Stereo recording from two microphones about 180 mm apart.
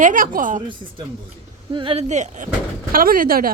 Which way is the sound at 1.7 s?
30° right (ahead or behind).